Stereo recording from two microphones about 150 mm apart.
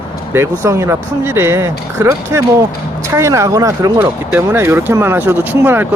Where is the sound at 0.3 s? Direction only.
20° right (ahead or behind).